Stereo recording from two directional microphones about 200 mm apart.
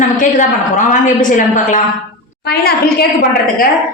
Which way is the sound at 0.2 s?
40° left (ahead or behind).